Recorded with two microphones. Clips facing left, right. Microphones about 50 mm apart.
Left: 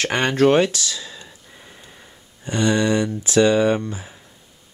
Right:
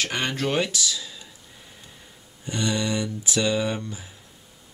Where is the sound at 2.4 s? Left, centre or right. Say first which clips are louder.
Left 7 dB; left.